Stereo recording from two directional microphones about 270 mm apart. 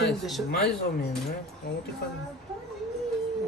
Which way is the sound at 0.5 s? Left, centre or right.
Left.